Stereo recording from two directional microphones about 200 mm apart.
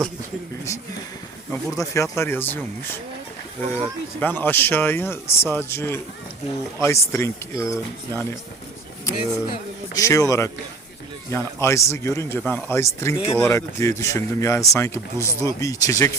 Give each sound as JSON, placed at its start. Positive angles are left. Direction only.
{"t": 1.5, "sound": "speech", "side_deg": 15}
{"t": 4.2, "sound": "speech", "side_deg": 10}